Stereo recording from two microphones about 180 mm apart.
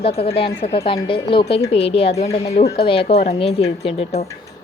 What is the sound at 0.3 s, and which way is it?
Speech, 30° left (ahead or behind).